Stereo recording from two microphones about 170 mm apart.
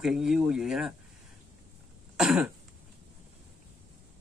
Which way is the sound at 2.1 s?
5° right (ahead or behind).